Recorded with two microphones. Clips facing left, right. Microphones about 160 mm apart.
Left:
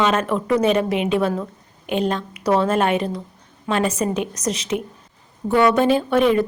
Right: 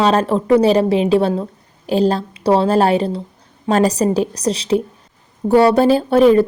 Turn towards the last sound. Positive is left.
turn(degrees=-35)  # may be behind; listen again after turning